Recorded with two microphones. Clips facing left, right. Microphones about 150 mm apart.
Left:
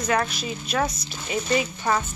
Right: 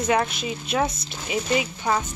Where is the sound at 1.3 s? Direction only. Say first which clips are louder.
Even; 10° right (ahead or behind).